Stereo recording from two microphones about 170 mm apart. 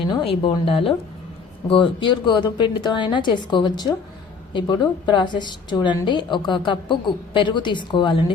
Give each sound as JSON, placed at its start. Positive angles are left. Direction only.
{"t": 0.1, "sound": "a woman's voice", "side_deg": 30}